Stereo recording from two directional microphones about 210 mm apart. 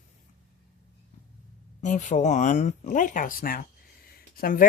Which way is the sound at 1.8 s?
35° left (ahead or behind).